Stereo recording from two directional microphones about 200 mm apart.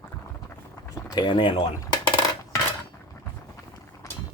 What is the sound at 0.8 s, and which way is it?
Speech, 20° left (ahead or behind).